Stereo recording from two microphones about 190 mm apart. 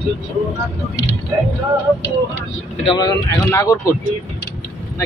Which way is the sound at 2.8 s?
20° left (ahead or behind).